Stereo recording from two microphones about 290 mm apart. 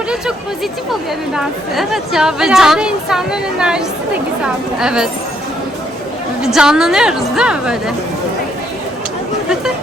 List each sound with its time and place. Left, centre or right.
1.4 s speech: centre
6.4 s speech: centre